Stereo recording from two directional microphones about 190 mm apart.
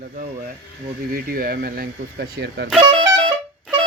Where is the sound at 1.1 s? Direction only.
50° right (ahead or behind).